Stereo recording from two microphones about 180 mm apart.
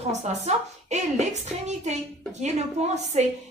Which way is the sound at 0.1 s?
40° right (ahead or behind).